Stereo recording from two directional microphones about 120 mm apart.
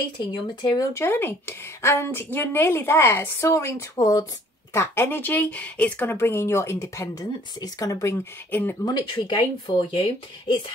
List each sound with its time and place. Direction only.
0.2 s speech: 40° left (ahead or behind)
0.9 s speech: 20° left (ahead or behind)
8.8 s speech: 35° left (ahead or behind)